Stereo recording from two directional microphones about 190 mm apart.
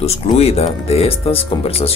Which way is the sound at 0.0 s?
35° left (ahead or behind).